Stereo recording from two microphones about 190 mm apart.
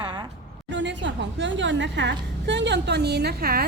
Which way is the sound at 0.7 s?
70° right (ahead or behind).